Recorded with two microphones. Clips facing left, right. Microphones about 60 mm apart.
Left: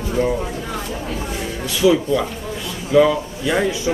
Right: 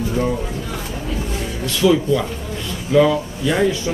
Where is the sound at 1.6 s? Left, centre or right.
Centre.